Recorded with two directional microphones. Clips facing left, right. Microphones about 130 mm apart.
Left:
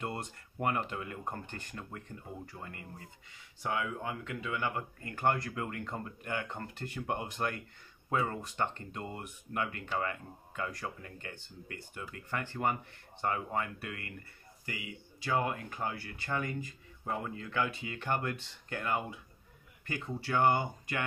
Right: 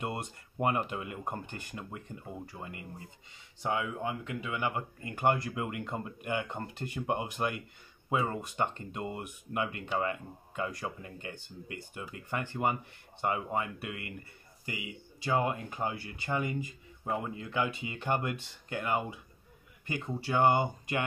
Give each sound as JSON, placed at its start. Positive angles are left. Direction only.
{"t": 0.0, "sound": "speech", "side_deg": -15}